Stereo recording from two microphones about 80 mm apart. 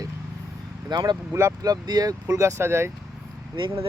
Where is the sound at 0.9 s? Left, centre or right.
Right.